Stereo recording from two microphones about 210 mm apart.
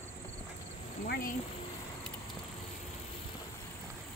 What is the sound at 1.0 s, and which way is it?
Speech, 50° left (ahead or behind).